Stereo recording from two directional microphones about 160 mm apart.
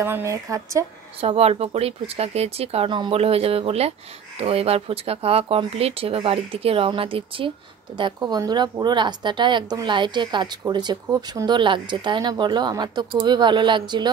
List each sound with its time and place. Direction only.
0.0 s speech: 15° right (ahead or behind)
1.2 s speech: 40° right (ahead or behind)